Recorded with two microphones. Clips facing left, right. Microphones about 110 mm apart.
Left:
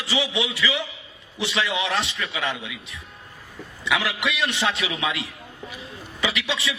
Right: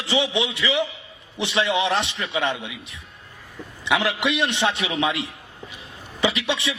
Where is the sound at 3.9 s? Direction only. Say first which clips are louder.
Right 3 dB; 20° right (ahead or behind).